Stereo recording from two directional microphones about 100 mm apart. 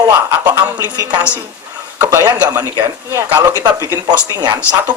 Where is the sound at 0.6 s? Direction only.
40° right (ahead or behind).